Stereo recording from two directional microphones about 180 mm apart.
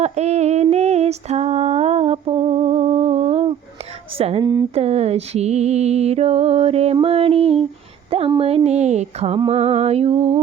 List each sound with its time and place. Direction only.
0.0 s female singing: 40° right (ahead or behind)
4.2 s a woman's voice: 30° right (ahead or behind)
4.7 s music: 35° right (ahead or behind)